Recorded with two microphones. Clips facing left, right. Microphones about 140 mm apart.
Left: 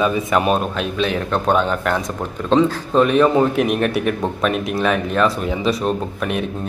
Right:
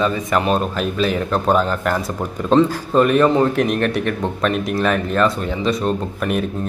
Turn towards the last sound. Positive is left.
turn(degrees=0)  # may be behind; listen again after turning